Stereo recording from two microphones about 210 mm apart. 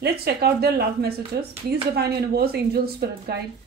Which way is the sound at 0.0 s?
50° right (ahead or behind).